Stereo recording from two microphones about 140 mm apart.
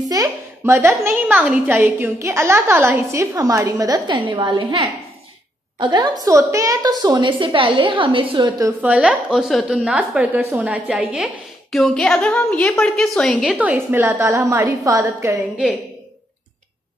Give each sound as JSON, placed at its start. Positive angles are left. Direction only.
{"t": 0.1, "sound": "a sound", "side_deg": -25}
{"t": 1.0, "sound": "a woman's voice", "side_deg": -10}
{"t": 5.8, "sound": "a woman's voice", "side_deg": -30}
{"t": 8.8, "sound": "a woman's voice", "side_deg": -10}
{"t": 13.6, "sound": "a woman's voice", "side_deg": -10}